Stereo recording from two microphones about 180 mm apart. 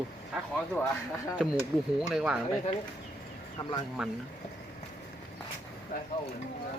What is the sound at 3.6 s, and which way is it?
Speech, 25° left (ahead or behind).